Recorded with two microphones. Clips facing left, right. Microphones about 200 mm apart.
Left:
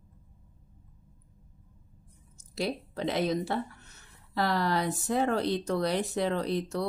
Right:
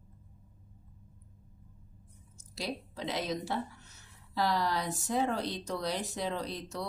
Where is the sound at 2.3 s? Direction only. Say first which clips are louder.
Left 6 dB; 60° left (ahead or behind).